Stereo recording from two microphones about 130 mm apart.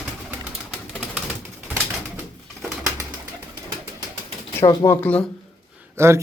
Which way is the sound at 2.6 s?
25° right (ahead or behind).